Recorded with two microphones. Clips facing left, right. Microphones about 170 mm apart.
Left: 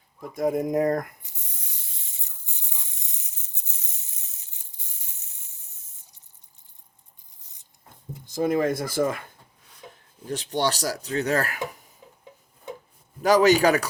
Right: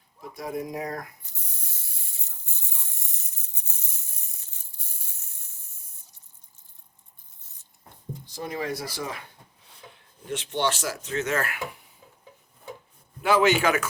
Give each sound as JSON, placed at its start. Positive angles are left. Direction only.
{"t": 0.2, "sound": "speech", "side_deg": 50}
{"t": 1.2, "sound": "spray", "side_deg": 15}
{"t": 2.5, "sound": "a sound", "side_deg": 15}
{"t": 8.3, "sound": "speech", "side_deg": 50}
{"t": 9.9, "sound": "speech", "side_deg": 35}
{"t": 13.2, "sound": "a man's voice", "side_deg": 40}